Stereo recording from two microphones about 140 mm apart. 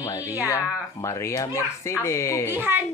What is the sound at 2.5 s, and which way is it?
Speech, 15° right (ahead or behind).